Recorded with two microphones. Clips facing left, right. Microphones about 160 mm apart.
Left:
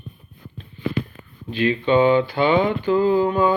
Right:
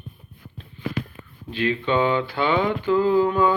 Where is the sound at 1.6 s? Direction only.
10° left (ahead or behind).